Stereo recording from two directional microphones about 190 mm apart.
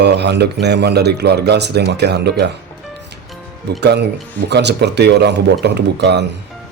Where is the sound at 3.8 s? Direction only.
60° right (ahead or behind).